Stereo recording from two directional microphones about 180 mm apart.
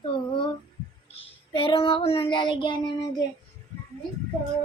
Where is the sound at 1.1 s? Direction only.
30° left (ahead or behind).